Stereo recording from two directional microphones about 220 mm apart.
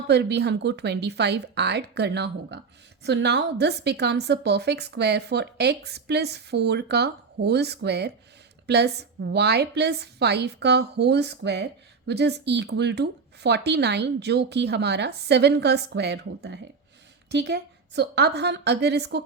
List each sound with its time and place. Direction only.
0.1 s a woman's voice: 50° right (ahead or behind)